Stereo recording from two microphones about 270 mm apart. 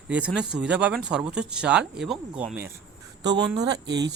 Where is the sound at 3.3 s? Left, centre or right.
Right.